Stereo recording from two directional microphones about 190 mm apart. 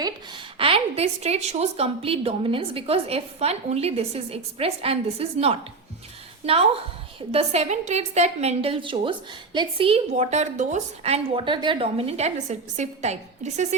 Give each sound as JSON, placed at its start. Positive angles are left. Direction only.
{"t": 0.6, "sound": "a woman's voice", "side_deg": -30}